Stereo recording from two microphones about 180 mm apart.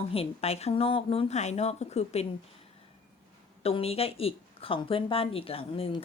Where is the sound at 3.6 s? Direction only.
35° left (ahead or behind).